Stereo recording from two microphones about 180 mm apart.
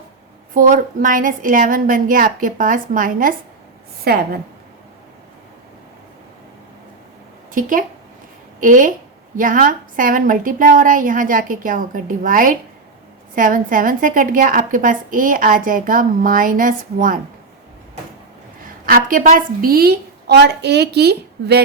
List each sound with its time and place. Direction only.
0.5 s a woman's voice: 50° right (ahead or behind)
7.5 s a woman's voice: 50° right (ahead or behind)
18.9 s a woman's voice: 50° right (ahead or behind)